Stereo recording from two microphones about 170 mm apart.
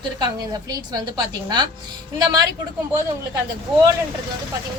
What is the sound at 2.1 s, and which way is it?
Speech, 20° right (ahead or behind).